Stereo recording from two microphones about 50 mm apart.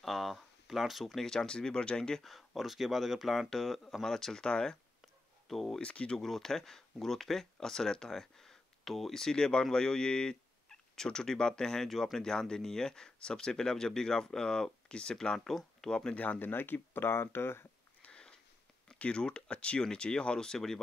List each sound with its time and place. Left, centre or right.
0.0 s a sound: centre
1.2 s speech: centre
2.2 s speech: centre
5.5 s speech: centre
5.8 s speech: left
6.1 s speech: centre
16.2 s speech: left
18.0 s a sound: centre
18.9 s speech: centre